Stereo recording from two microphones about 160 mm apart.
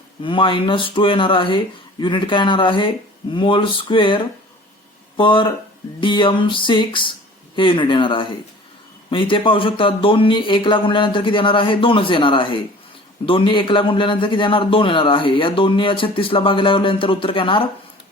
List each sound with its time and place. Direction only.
0.2 s a man's voice: 30° left (ahead or behind)